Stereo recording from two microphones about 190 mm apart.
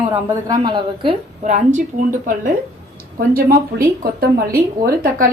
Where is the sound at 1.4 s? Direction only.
40° right (ahead or behind).